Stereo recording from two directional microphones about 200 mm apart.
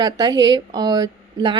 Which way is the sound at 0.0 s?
20° right (ahead or behind).